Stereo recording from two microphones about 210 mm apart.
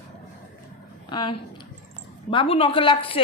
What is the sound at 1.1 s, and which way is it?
A woman's voice, 20° left (ahead or behind).